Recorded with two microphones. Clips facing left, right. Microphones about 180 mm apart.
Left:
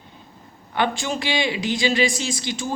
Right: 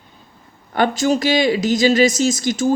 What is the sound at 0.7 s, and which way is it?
Speech, 40° right (ahead or behind).